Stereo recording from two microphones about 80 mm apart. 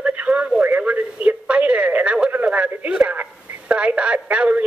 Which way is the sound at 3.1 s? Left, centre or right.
Centre.